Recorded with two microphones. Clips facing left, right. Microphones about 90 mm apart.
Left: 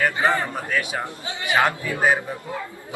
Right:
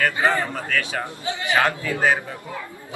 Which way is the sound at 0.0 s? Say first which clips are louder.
Even; 20° left (ahead or behind).